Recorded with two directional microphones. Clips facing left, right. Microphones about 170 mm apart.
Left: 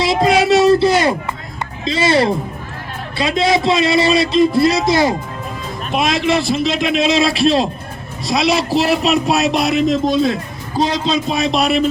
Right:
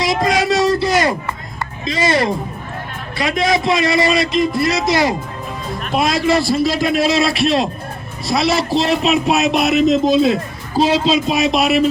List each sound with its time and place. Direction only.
0.0 s a sound: 25° left (ahead or behind)
1.8 s a man's voice: 30° left (ahead or behind)
8.2 s a man's voice: centre (ahead or behind)
9.8 s speech: 20° right (ahead or behind)
11.1 s a man's voice: 5° right (ahead or behind)